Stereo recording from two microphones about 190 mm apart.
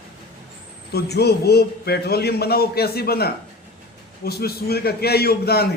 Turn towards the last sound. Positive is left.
turn(degrees=55)  # may be behind; listen again after turning